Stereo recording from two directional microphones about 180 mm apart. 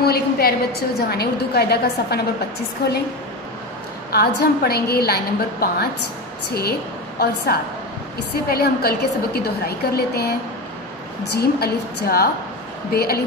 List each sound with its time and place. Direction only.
0.0 s a woman's voice: 60° left (ahead or behind)
4.1 s a woman's voice: 60° left (ahead or behind)
7.5 s a woman's voice: 55° left (ahead or behind)
11.3 s a woman's voice: 60° left (ahead or behind)